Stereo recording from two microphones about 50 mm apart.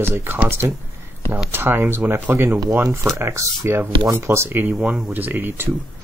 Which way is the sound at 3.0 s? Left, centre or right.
Right.